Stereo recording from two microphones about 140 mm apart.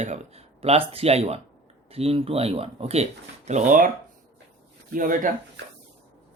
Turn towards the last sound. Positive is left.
turn(degrees=-70)  # may be behind; listen again after turning